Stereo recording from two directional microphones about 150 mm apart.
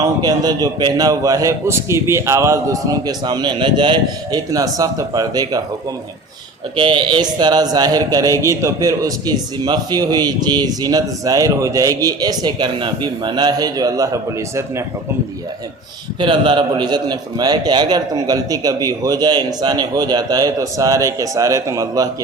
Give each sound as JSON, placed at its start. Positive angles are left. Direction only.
{"t": 0.0, "sound": "a man's voice", "side_deg": -25}
{"t": 6.7, "sound": "a man's voice", "side_deg": -30}
{"t": 16.2, "sound": "a man's voice", "side_deg": -30}